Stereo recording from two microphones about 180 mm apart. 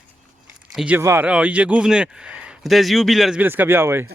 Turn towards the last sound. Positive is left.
turn(degrees=-10)  # may be behind; listen again after turning